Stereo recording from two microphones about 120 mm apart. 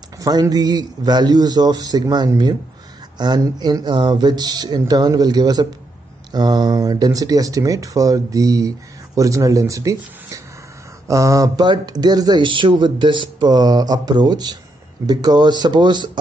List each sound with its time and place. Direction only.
0.2 s speech: 35° right (ahead or behind)
11.1 s speech: 25° right (ahead or behind)